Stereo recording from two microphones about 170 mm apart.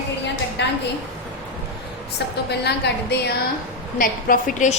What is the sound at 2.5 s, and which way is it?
Speech, 80° left.